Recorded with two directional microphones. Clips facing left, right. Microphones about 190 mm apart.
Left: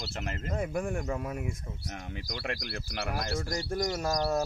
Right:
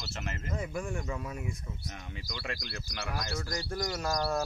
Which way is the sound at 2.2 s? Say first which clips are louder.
Left 3 dB; 60° left (ahead or behind).